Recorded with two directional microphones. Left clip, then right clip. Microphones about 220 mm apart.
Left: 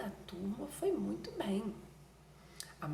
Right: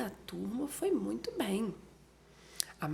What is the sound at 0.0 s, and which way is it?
A woman's voice, 50° right (ahead or behind).